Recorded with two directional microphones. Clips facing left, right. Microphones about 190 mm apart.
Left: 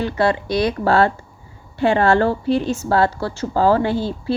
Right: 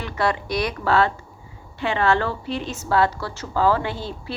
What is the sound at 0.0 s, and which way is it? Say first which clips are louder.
Speech: left 5 dB; 30° left (ahead or behind).